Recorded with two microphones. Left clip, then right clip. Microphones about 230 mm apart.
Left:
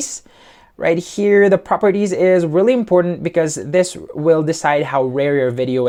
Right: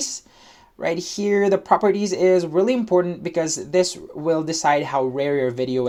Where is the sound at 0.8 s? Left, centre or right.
Left.